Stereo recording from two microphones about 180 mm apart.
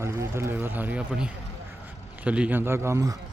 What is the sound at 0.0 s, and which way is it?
Speech, 15° right (ahead or behind).